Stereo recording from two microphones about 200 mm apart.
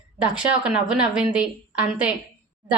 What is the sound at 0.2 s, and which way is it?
A woman's voice, 5° right (ahead or behind).